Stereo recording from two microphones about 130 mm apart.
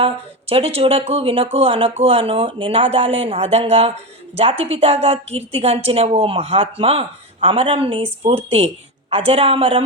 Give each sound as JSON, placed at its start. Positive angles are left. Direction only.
{"t": 0.0, "sound": "speech", "side_deg": -50}